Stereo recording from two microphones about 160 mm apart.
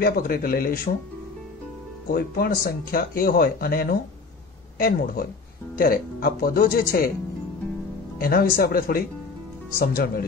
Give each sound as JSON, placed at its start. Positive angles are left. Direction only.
{"t": 0.0, "sound": "speech", "side_deg": 65}
{"t": 2.1, "sound": "speech", "side_deg": 70}
{"t": 8.2, "sound": "speech", "side_deg": 70}